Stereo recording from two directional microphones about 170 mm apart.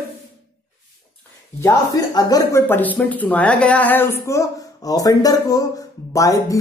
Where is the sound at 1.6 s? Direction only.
20° left (ahead or behind).